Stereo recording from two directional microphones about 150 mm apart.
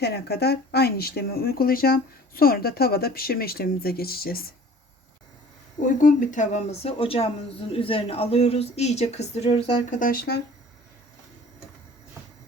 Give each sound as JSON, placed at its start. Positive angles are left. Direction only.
{"t": 0.0, "sound": "speech", "side_deg": 90}
{"t": 5.8, "sound": "speech", "side_deg": 60}
{"t": 9.9, "sound": "speech", "side_deg": 65}